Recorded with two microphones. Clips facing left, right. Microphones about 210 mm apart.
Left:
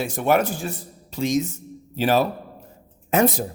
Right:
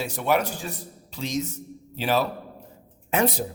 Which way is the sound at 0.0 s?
50° left (ahead or behind).